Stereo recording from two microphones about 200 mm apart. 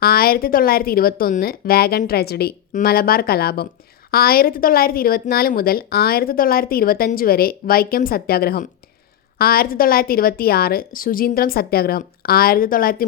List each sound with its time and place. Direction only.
0.0 s a woman's voice: 50° left (ahead or behind)